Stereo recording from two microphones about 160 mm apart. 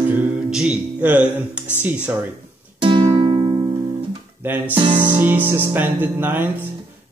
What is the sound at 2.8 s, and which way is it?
Music, 30° right (ahead or behind).